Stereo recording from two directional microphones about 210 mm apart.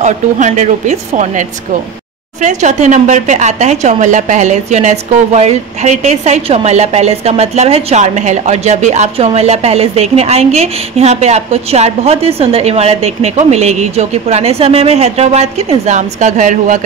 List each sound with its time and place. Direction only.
0.0 s speech: 35° right (ahead or behind)
2.4 s speech: 35° right (ahead or behind)